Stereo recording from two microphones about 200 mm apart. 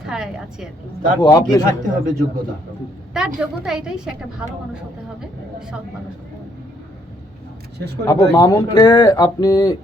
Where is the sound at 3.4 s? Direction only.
5° right (ahead or behind).